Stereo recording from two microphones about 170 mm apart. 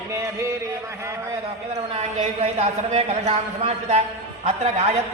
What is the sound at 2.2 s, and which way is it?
A man's voice, 45° right (ahead or behind).